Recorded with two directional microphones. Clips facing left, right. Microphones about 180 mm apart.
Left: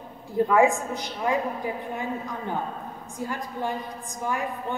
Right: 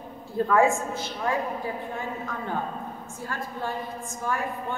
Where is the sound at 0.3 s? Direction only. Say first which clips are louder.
Left 1 dB; 15° left (ahead or behind).